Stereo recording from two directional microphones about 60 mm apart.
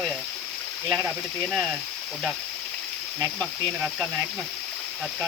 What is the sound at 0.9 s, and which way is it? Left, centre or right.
Speech, right.